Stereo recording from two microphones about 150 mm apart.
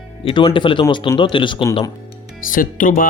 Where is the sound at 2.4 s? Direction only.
65° left (ahead or behind).